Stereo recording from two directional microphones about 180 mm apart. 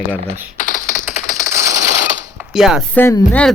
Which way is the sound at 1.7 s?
40° right (ahead or behind).